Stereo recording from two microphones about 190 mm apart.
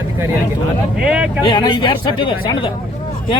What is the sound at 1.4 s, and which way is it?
Speech, 25° left (ahead or behind).